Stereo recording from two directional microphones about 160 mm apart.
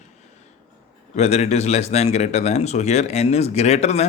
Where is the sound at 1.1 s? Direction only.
45° left (ahead or behind).